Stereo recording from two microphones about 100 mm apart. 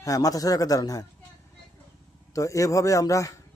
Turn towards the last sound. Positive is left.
turn(degrees=35)  # may be behind; listen again after turning